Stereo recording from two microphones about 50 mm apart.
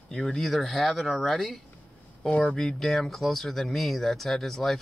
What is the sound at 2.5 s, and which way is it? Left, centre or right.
Speech, centre.